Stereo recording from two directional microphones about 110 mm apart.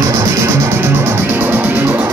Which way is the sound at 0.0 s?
30° right (ahead or behind).